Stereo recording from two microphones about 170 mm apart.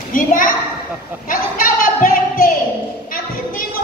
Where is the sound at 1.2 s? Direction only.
55° left (ahead or behind).